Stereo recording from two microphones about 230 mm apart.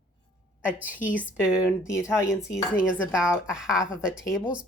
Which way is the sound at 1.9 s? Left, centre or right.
Centre.